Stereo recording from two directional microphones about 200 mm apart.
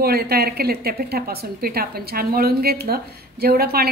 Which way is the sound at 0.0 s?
50° right (ahead or behind).